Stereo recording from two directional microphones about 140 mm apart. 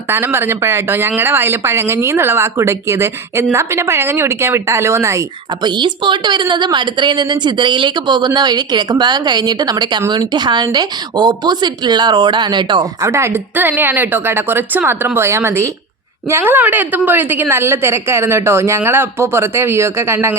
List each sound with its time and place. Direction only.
0.1 s speech: 15° right (ahead or behind)
5.6 s a woman's voice: 30° right (ahead or behind)
13.0 s a woman's voice: 20° right (ahead or behind)